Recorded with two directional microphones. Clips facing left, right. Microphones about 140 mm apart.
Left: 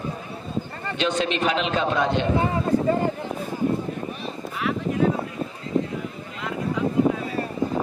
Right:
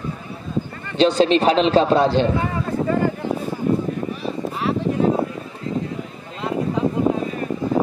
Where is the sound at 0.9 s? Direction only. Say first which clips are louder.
Right 9 dB; 35° right (ahead or behind).